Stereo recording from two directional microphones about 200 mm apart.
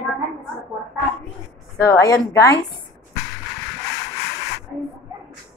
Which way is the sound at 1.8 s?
15° left (ahead or behind).